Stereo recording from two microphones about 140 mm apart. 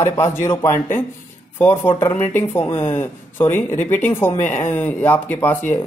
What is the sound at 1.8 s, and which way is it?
Speech, 40° left (ahead or behind).